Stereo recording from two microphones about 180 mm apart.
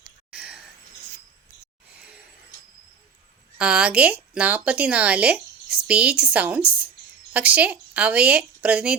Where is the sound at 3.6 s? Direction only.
5° right (ahead or behind).